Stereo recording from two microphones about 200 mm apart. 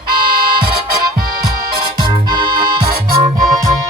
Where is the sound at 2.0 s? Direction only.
20° right (ahead or behind).